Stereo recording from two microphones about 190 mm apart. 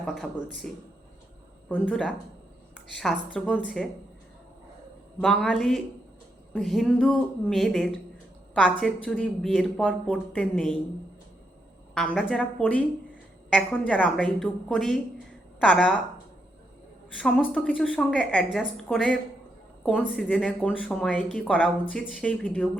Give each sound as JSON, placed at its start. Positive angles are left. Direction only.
{"t": 0.0, "sound": "speech", "side_deg": 5}
{"t": 1.7, "sound": "a woman's voice", "side_deg": 5}
{"t": 5.2, "sound": "a woman's voice", "side_deg": 0}
{"t": 11.9, "sound": "a woman's voice", "side_deg": 5}
{"t": 17.2, "sound": "a woman's voice", "side_deg": 5}
{"t": 20.1, "sound": "a woman's voice", "side_deg": -5}